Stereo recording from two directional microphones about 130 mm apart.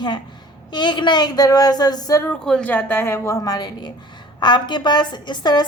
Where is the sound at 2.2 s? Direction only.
5° left (ahead or behind).